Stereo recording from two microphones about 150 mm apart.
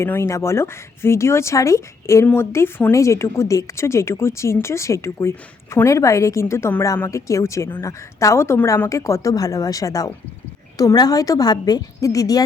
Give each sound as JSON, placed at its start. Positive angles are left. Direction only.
{"t": 0.0, "sound": "speech", "side_deg": 15}